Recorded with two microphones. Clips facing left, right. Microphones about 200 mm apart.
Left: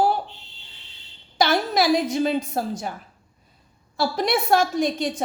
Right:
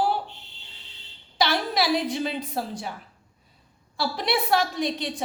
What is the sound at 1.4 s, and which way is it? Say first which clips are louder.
A woman's voice: left 4 dB; 45° left (ahead or behind).